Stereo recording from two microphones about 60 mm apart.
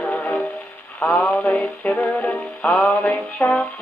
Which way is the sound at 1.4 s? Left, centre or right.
Left.